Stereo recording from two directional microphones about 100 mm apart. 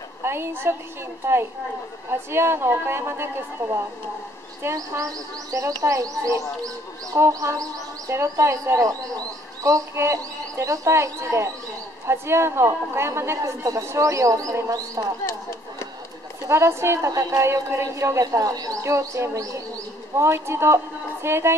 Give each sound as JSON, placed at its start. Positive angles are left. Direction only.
{"t": 0.2, "sound": "a woman's voice", "side_deg": -25}
{"t": 2.0, "sound": "a woman's voice", "side_deg": -25}
{"t": 16.4, "sound": "a woman's voice", "side_deg": -25}